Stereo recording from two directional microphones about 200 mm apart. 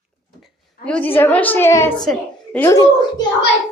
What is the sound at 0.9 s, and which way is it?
A woman's voice, 5° left (ahead or behind).